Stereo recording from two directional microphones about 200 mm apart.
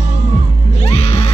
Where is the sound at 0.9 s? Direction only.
30° left (ahead or behind).